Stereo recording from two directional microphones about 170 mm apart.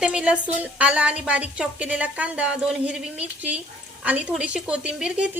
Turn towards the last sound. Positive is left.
turn(degrees=-5)  # may be behind; listen again after turning